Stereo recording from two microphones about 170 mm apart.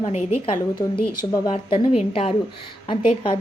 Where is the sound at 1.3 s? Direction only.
25° left (ahead or behind).